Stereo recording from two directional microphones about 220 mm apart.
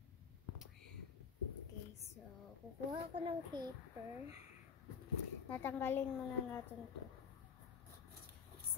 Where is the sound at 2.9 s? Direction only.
25° right (ahead or behind).